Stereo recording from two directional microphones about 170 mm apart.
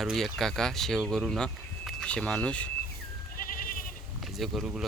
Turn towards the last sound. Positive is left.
turn(degrees=0)  # may be behind; listen again after turning